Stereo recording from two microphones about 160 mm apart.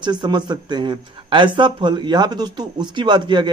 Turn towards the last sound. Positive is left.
turn(degrees=-30)  # may be behind; listen again after turning